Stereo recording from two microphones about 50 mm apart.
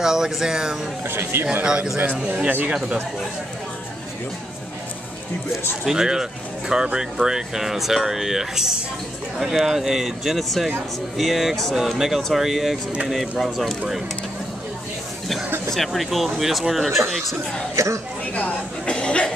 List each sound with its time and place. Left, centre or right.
0.0 s speech: centre
1.0 s speech: right
1.6 s a man's voice: centre
5.9 s speech: centre
15.7 s speech: centre
17.7 s speech: right
18.3 s speech: left